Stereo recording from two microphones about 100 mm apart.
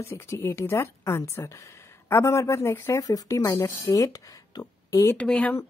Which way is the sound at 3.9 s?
35° left (ahead or behind).